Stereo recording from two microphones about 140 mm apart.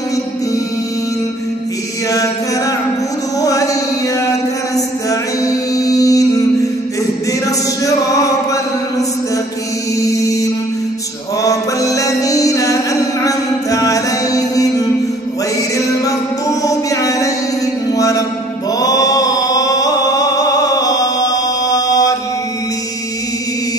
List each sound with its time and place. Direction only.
2.0 s chant: 25° left (ahead or behind)
3.3 s music: 25° left (ahead or behind)
7.4 s a sound: 25° left (ahead or behind)
9.9 s music: 25° left (ahead or behind)
18.8 s chant: 25° left (ahead or behind)